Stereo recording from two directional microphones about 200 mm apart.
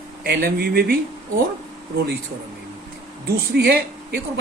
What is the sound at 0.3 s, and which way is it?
Speech, 50° right (ahead or behind).